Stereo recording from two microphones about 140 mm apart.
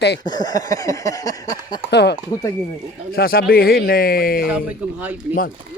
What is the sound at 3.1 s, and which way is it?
Speech, 90° left.